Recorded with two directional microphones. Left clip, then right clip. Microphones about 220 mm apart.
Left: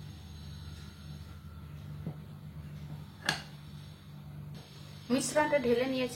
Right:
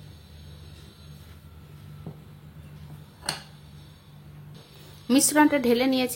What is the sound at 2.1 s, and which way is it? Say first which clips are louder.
Vehicle: right 2 dB; 25° right (ahead or behind).